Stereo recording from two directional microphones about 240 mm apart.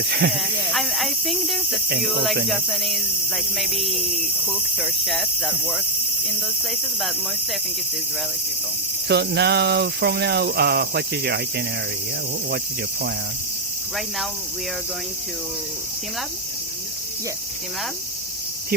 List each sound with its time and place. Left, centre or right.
0.3 s cricket: centre
2.0 s speech: centre
9.0 s cricket: right